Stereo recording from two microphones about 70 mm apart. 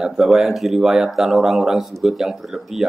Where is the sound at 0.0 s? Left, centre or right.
Centre.